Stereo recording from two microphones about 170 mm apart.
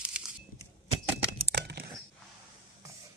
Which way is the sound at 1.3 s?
75° right (ahead or behind).